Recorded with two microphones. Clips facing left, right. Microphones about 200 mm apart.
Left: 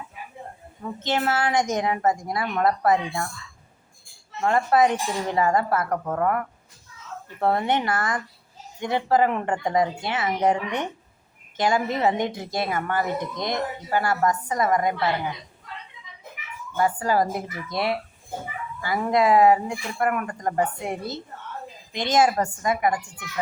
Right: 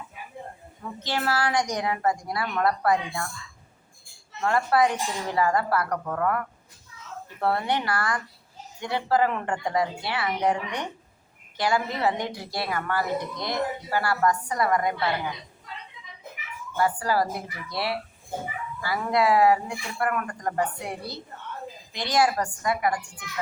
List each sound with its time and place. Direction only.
0.9 s a woman's voice: 20° left (ahead or behind)
4.4 s a woman's voice: 20° left (ahead or behind)
7.4 s a woman's voice: 20° left (ahead or behind)
16.7 s a woman's voice: 20° left (ahead or behind)